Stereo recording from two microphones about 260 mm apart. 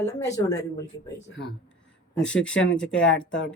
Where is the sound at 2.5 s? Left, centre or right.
Left.